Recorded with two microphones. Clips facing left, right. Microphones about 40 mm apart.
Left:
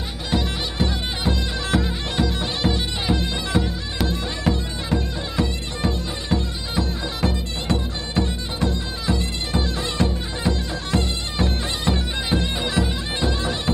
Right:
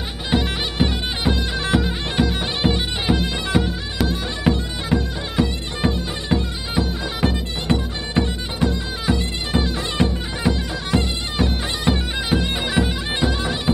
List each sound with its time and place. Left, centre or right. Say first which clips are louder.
0.3 s bagpipes: right 3 dB; right
4.1 s music: right 3 dB; right